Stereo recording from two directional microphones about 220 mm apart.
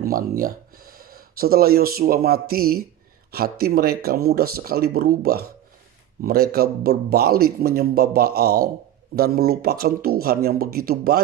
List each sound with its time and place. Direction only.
0.0 s speech: 40° right (ahead or behind)